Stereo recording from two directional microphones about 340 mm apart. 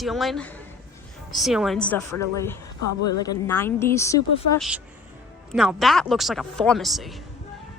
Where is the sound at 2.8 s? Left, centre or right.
Left.